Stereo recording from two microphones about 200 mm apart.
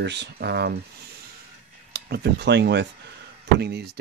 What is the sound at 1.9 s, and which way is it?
Speech, 55° right (ahead or behind).